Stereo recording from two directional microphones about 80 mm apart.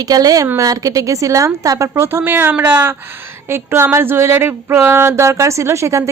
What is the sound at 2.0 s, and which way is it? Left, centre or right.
Speech, right.